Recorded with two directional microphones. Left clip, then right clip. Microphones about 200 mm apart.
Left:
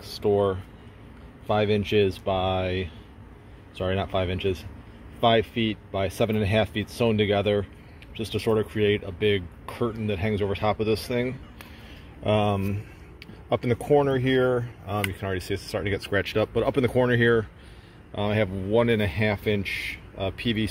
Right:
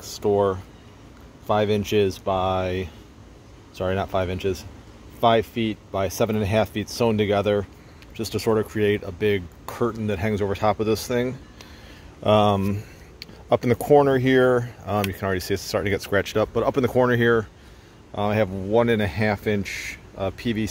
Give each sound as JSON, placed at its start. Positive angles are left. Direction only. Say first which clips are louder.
{"t": 0.0, "sound": "speech", "louder": "right 2 dB", "side_deg": -15}